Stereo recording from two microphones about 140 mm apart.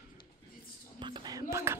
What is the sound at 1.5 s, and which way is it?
Speech, 20° right (ahead or behind).